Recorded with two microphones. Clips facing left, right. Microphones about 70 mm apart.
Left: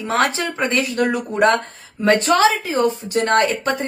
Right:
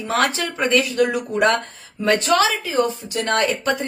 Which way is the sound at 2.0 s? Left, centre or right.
Left.